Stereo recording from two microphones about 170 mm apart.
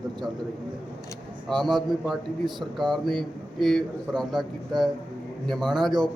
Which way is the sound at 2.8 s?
Centre (ahead or behind).